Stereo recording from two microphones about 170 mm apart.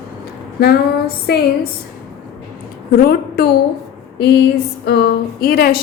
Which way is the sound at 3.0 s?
65° left (ahead or behind).